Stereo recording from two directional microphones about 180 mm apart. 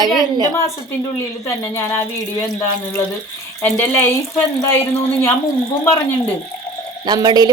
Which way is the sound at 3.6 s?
10° left (ahead or behind).